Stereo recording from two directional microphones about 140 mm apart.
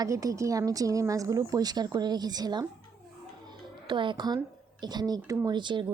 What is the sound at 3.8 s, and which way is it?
A woman's voice, 35° right (ahead or behind).